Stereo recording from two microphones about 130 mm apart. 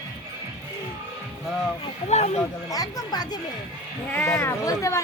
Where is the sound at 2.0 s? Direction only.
55° left (ahead or behind).